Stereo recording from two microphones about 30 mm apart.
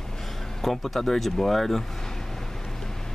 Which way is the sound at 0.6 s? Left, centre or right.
Centre.